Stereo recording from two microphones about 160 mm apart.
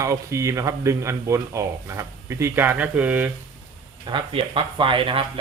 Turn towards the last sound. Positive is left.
turn(degrees=-35)  # may be behind; listen again after turning